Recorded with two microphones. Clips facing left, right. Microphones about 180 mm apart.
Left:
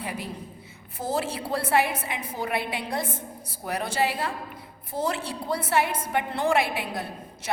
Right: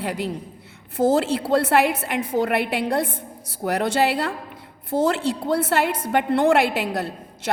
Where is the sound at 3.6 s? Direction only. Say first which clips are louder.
Right 6 dB; 80° right.